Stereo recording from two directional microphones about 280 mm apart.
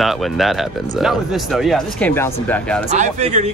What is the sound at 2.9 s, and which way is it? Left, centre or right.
Speech, right.